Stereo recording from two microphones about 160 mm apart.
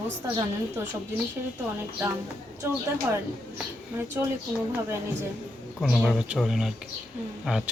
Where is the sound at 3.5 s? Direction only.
10° right (ahead or behind).